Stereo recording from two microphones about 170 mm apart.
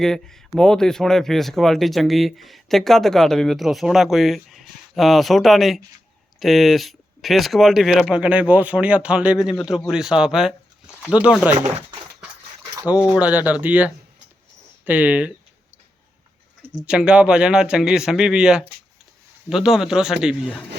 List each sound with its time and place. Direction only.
0.0 s speech: 5° left (ahead or behind)
13.1 s speech: 10° right (ahead or behind)
16.8 s speech: 5° right (ahead or behind)